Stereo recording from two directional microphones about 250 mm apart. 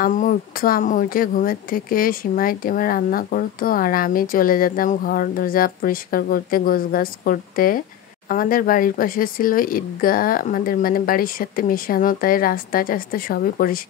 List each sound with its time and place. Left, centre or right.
0.0 s a woman's voice: left